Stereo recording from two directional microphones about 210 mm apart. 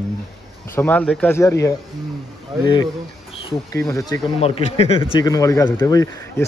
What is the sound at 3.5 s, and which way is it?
Speech, 15° left (ahead or behind).